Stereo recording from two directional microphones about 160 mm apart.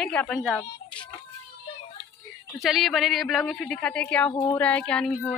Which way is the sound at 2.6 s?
Centre (ahead or behind).